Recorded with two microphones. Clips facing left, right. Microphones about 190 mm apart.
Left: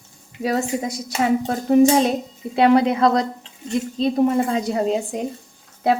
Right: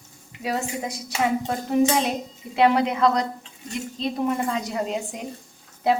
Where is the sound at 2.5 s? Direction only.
35° left (ahead or behind).